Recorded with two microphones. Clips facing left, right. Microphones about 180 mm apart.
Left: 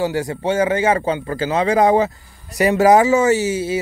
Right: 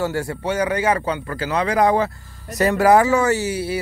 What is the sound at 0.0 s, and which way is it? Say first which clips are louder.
Speech: left 3 dB; 15° left (ahead or behind).